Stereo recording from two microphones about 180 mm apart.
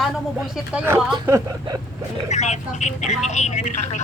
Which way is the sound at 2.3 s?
40° left (ahead or behind).